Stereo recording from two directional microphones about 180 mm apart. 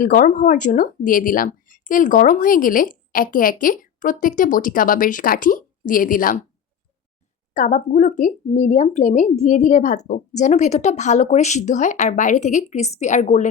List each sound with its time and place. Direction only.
0.0 s speech: 50° left (ahead or behind)
7.5 s speech: 45° left (ahead or behind)